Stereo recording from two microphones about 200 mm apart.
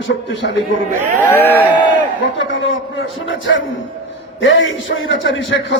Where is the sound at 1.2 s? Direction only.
10° left (ahead or behind).